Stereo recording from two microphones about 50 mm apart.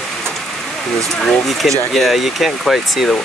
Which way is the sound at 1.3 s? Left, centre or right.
Centre.